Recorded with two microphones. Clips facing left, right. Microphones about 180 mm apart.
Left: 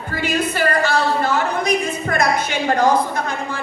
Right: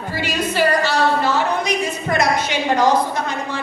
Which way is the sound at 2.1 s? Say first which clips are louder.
Right 1 dB; 50° left (ahead or behind).